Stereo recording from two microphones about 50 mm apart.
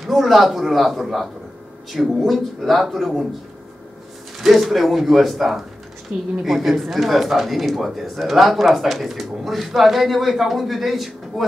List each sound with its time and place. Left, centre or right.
0.0 s speech: centre
4.4 s speech: centre
6.1 s a woman's voice: right
6.4 s speech: centre